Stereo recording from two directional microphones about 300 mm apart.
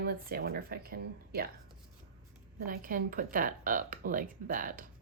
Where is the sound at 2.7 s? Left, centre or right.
Right.